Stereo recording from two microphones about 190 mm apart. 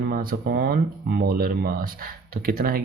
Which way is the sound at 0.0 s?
50° right (ahead or behind).